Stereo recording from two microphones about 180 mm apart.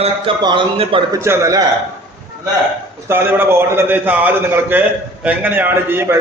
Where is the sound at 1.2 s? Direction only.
15° right (ahead or behind).